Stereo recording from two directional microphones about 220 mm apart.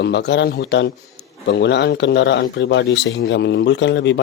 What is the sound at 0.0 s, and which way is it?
Speech, 50° left (ahead or behind).